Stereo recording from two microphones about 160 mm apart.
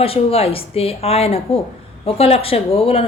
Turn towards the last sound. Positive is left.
turn(degrees=35)  # may be behind; listen again after turning